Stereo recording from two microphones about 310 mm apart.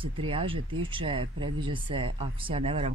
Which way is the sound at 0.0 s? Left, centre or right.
Centre.